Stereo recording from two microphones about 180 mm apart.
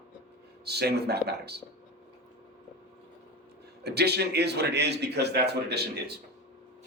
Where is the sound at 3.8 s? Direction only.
65° right (ahead or behind).